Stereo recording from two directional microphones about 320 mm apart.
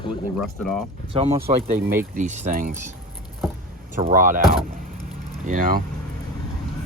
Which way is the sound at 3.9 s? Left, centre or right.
Right.